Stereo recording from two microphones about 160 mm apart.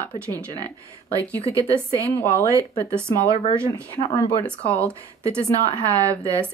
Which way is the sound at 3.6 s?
25° left (ahead or behind).